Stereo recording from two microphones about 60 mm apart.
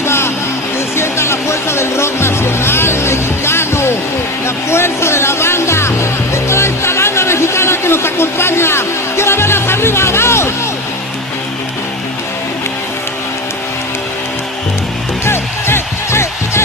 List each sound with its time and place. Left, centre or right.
0.0 s music: left
15.2 s music: left